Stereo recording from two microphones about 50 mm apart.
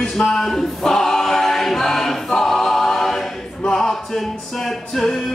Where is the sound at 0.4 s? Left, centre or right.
Centre.